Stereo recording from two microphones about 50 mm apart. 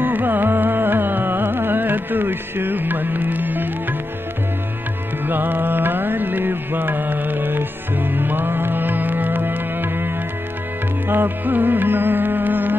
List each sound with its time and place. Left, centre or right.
0.0 s music: right
5.2 s music: right